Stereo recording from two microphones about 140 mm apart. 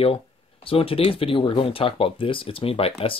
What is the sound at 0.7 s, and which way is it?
Speech, 40° left (ahead or behind).